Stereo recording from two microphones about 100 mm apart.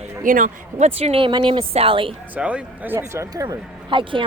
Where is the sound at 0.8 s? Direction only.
85° right.